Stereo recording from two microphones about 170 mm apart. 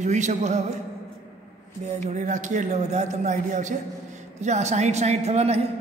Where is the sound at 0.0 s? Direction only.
45° right (ahead or behind).